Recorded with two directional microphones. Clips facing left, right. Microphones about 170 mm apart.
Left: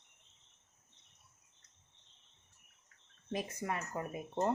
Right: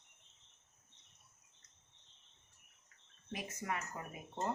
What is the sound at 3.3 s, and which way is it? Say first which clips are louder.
Speech: left 4 dB; 30° left (ahead or behind).